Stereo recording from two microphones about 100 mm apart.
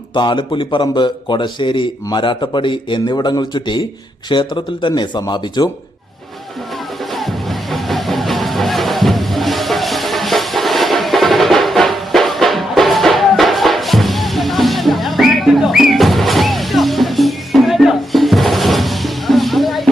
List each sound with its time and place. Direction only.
0.1 s a man's voice: 50° left (ahead or behind)
7.2 s music: centre (ahead or behind)